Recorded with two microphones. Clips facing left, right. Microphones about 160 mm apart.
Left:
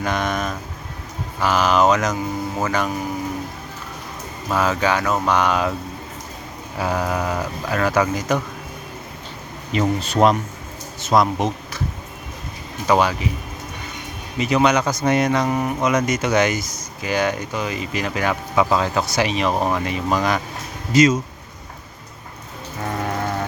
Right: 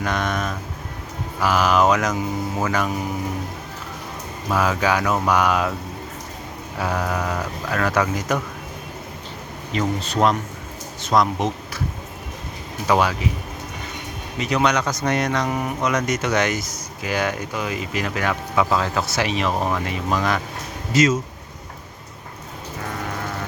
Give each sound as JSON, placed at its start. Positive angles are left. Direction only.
{"t": 0.0, "sound": "speech", "side_deg": 0}
{"t": 4.5, "sound": "speech", "side_deg": 0}
{"t": 6.7, "sound": "speech", "side_deg": 5}
{"t": 9.7, "sound": "speech", "side_deg": 15}
{"t": 11.0, "sound": "speech", "side_deg": 5}
{"t": 12.9, "sound": "speech", "side_deg": 0}
{"t": 14.3, "sound": "speech", "side_deg": 5}